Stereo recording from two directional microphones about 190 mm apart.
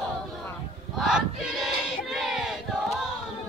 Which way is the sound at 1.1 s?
Centre (ahead or behind).